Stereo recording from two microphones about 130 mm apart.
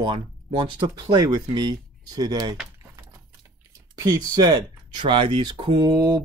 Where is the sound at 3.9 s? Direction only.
30° right (ahead or behind).